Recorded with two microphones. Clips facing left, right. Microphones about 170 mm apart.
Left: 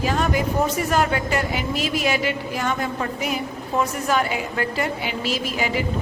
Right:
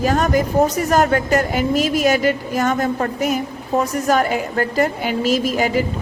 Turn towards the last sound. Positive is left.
turn(degrees=-45)  # may be behind; listen again after turning